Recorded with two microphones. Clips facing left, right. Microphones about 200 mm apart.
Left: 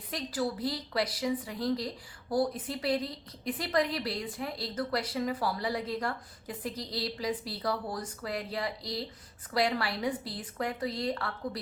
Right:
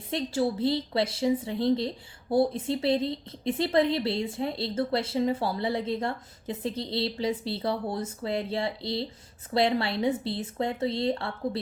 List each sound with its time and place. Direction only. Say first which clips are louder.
0.1 s a woman's voice: right 6 dB; 25° right (ahead or behind)